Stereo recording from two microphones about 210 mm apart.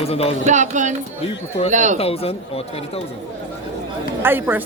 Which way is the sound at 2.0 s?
30° left (ahead or behind).